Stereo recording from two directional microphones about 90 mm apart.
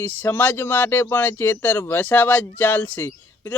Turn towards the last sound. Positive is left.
turn(degrees=20)  # may be behind; listen again after turning